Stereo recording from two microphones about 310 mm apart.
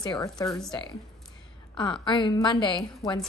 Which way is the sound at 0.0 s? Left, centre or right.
Centre.